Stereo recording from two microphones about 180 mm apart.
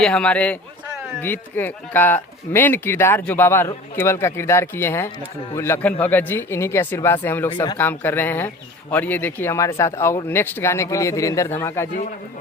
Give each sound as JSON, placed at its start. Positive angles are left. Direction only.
{"t": 0.0, "sound": "speech", "side_deg": 5}
{"t": 7.5, "sound": "speech", "side_deg": 25}
{"t": 7.8, "sound": "speech", "side_deg": 10}